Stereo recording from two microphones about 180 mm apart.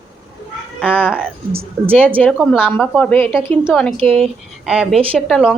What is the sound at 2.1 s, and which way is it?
A woman's voice, 5° left (ahead or behind).